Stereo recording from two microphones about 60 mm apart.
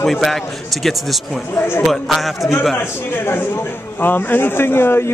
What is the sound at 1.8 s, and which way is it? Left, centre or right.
Speech, centre.